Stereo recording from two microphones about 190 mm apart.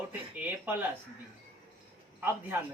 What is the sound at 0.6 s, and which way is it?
Speech, 10° right (ahead or behind).